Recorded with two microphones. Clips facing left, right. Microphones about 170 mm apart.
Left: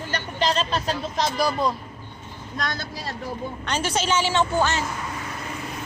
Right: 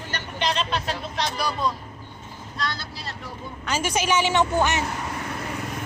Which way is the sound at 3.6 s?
10° right (ahead or behind).